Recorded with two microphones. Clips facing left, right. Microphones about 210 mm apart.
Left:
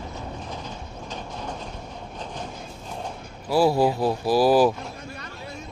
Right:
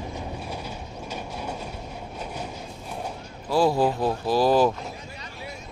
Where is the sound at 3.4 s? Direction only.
10° left (ahead or behind).